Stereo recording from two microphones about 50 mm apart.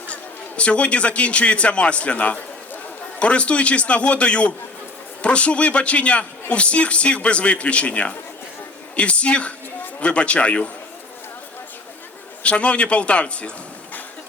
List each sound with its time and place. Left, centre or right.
0.1 s a man's voice: left
12.4 s a man's voice: left